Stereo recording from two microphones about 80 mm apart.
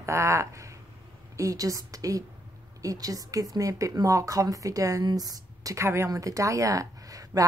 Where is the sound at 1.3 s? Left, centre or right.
Right.